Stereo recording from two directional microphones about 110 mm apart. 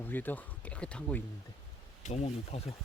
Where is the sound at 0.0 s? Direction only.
15° left (ahead or behind).